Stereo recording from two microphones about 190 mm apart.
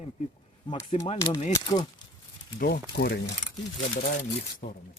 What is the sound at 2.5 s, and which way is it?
Speech, 50° left (ahead or behind).